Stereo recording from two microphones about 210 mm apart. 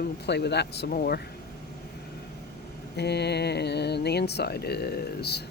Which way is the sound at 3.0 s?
50° left (ahead or behind).